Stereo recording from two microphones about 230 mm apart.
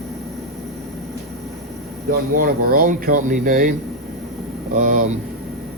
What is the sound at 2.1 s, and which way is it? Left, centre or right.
Speech, right.